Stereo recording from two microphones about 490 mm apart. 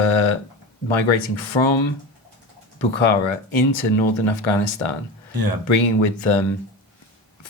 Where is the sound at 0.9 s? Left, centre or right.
Left.